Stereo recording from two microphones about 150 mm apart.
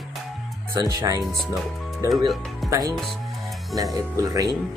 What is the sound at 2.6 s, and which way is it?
Speech, 20° right (ahead or behind).